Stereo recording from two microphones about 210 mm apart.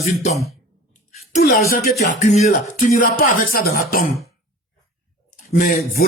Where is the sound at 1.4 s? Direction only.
45° left (ahead or behind).